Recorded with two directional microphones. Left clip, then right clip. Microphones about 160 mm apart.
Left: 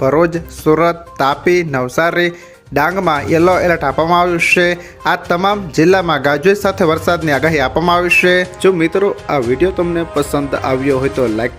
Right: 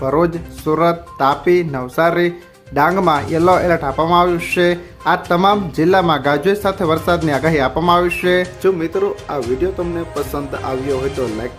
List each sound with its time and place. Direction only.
0.0 s speech: 20° left (ahead or behind)